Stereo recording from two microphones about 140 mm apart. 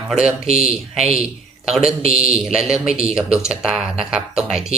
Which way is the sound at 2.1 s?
45° right (ahead or behind).